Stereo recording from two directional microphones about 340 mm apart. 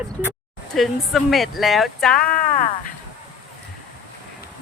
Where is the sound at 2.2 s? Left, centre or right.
Left.